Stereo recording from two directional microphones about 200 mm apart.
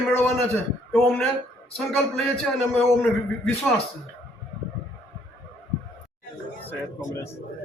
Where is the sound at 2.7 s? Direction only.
5° left (ahead or behind).